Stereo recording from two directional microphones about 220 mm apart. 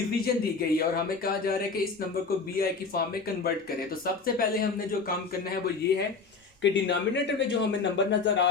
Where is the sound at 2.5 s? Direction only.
45° left (ahead or behind).